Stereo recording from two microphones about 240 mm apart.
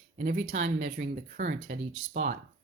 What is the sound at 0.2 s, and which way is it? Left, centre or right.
Speech, right.